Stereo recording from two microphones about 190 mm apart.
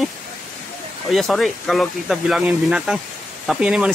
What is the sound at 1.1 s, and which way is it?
Speech, centre (ahead or behind).